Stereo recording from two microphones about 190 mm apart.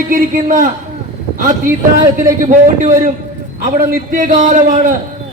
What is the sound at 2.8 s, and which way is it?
A man's voice, 45° right (ahead or behind).